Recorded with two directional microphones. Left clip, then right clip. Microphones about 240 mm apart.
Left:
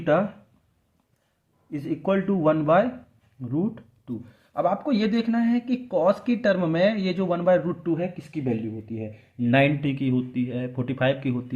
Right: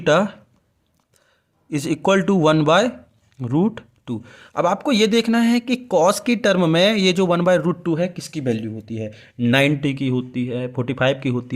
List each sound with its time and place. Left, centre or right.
0.0 s speech: right
1.7 s speech: right